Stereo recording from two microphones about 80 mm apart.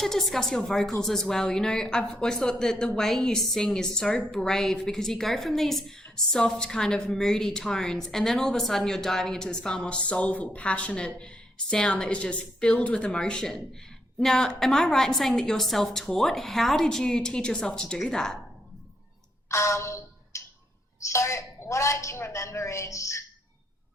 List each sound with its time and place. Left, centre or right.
0.0 s a woman's voice: centre
19.5 s a sound: left
21.0 s a woman's voice: left